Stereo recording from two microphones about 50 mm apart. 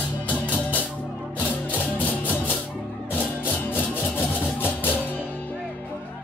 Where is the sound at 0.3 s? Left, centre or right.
Left.